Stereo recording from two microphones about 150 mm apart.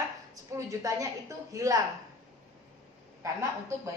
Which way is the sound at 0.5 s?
20° right (ahead or behind).